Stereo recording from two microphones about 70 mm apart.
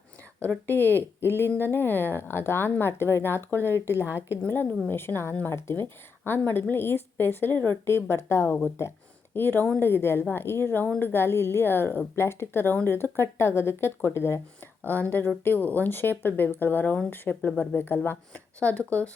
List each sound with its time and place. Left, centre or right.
0.7 s a woman's voice: left
14.8 s speech: left
18.3 s speech: centre